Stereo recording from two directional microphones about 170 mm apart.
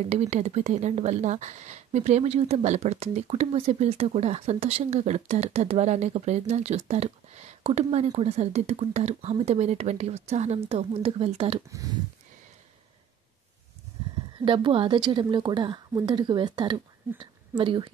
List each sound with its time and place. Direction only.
0.1 s speech: 40° right (ahead or behind)
11.7 s a woman's voice: 20° right (ahead or behind)
14.4 s a woman's voice: 30° right (ahead or behind)